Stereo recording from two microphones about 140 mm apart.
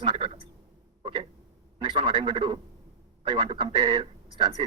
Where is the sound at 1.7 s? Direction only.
35° right (ahead or behind).